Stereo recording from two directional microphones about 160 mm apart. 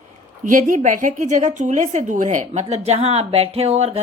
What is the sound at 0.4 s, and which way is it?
A woman's voice, 55° right (ahead or behind).